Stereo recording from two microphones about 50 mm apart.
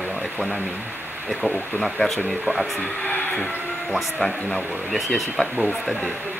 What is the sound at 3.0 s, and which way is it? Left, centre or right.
Printer, left.